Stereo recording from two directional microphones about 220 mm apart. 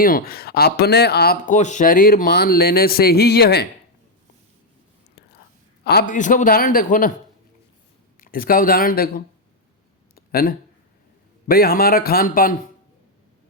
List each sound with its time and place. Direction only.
0.0 s speech: 40° left (ahead or behind)
5.8 s a man's voice: 45° left (ahead or behind)
8.2 s a man's voice: 40° left (ahead or behind)
10.2 s a sound: 45° left (ahead or behind)
11.4 s speech: 45° left (ahead or behind)